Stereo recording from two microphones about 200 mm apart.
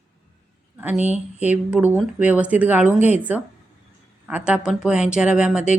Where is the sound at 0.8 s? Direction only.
10° right (ahead or behind).